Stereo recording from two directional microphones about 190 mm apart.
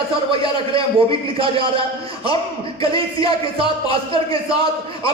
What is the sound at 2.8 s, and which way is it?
Speech, 30° right (ahead or behind).